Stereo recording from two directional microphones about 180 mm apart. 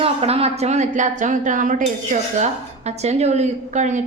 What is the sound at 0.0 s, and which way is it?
A woman's voice, 35° right (ahead or behind).